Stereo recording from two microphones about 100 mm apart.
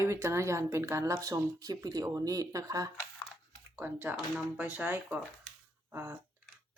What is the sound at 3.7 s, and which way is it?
A woman's voice, 20° right (ahead or behind).